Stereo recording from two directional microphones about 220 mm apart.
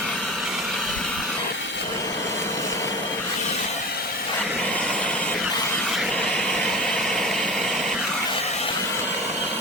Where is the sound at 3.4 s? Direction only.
40° left (ahead or behind).